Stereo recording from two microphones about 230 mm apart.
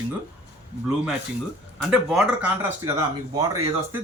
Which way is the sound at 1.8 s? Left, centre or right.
Centre.